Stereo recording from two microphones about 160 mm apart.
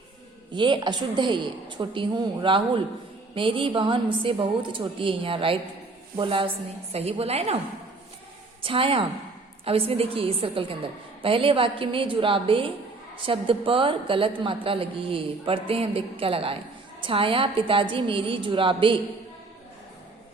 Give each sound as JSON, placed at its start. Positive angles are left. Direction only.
{"t": 0.5, "sound": "a woman's voice", "side_deg": -30}
{"t": 8.6, "sound": "a woman's voice", "side_deg": -35}